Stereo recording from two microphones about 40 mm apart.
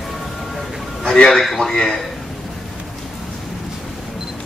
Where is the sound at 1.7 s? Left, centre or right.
Centre.